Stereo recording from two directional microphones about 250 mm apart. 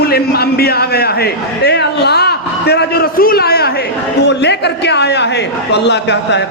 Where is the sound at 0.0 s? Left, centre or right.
Left.